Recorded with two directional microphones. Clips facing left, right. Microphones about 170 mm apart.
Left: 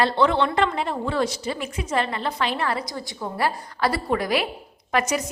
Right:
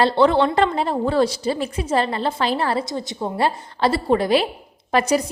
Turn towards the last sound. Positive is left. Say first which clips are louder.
# right 5 dB
turn(degrees=-30)  # may be behind; listen again after turning